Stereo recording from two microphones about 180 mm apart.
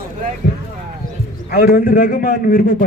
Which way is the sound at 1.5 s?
60° left (ahead or behind).